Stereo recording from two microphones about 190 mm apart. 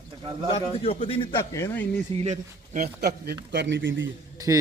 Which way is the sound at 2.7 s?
55° right (ahead or behind).